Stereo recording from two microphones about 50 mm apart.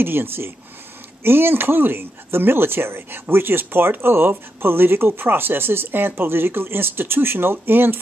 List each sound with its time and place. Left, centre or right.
0.0 s speech: right